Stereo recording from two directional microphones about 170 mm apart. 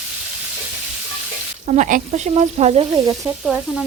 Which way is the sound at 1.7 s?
50° right (ahead or behind).